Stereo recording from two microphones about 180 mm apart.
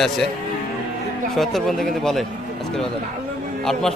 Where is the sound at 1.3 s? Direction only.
Centre (ahead or behind).